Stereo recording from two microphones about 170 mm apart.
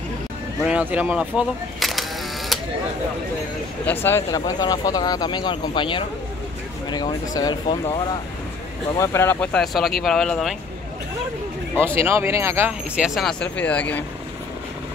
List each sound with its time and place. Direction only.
0.7 s speech: 10° right (ahead or behind)
3.8 s speech: 15° left (ahead or behind)
9.0 s speech: 15° left (ahead or behind)
11.8 s speech: 15° right (ahead or behind); by 14.0 s 10° left (ahead or behind)